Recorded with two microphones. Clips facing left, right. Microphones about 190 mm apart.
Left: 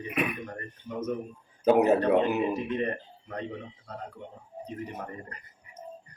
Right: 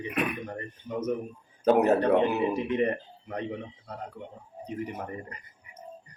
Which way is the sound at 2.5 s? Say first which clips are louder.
Right 3 dB; 20° right (ahead or behind).